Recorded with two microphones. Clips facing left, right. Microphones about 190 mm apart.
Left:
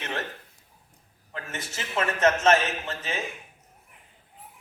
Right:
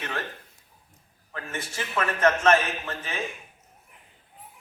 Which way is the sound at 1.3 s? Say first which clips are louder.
Right 1 dB; 20° left (ahead or behind).